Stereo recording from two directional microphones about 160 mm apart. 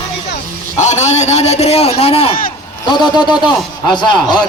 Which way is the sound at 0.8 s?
50° left (ahead or behind).